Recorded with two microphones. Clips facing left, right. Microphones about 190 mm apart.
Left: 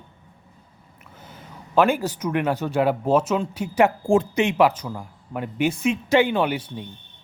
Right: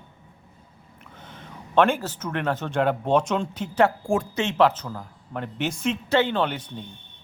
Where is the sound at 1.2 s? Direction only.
5° left (ahead or behind).